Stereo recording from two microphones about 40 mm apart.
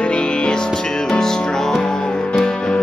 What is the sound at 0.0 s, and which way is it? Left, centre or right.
Music, left.